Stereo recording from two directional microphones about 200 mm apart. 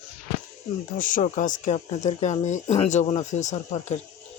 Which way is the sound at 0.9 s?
40° left (ahead or behind).